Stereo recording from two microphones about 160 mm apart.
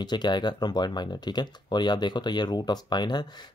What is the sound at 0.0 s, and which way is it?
Speech, 25° left (ahead or behind).